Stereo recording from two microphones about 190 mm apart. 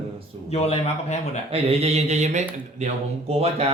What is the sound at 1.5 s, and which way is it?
Speech, 30° right (ahead or behind).